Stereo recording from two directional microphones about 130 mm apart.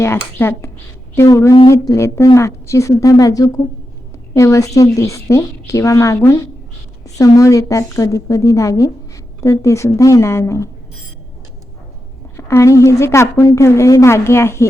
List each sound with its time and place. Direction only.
0.0 s a woman's voice: 20° left (ahead or behind)
12.5 s a woman's voice: 20° left (ahead or behind)